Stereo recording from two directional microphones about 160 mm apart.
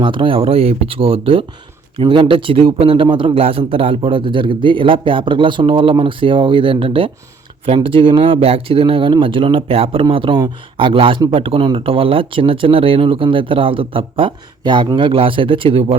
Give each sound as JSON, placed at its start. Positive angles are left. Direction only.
{"t": 0.0, "sound": "a man's voice", "side_deg": -30}